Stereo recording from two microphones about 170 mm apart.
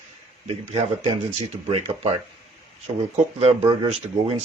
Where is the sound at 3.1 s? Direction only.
35° right (ahead or behind).